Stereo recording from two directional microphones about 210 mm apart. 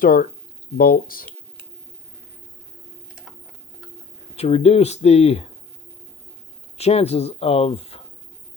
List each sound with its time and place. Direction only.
0.0 s speech: 45° left (ahead or behind)
4.4 s speech: 30° left (ahead or behind)
6.7 s speech: 30° left (ahead or behind)